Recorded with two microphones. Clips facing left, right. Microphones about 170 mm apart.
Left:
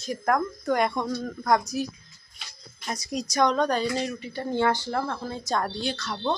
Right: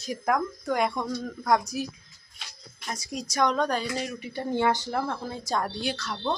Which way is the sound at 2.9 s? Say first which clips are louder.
Left 4 dB; 5° right (ahead or behind).